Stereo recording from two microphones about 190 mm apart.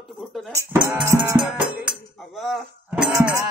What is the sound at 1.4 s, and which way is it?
Speech, 5° right (ahead or behind).